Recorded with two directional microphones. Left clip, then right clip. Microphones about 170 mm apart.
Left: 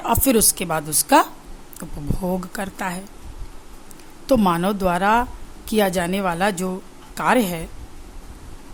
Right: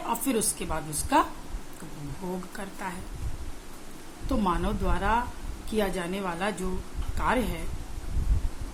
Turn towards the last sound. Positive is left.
turn(degrees=80)